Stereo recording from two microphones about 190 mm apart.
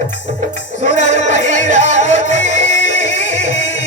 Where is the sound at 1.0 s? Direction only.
70° left (ahead or behind).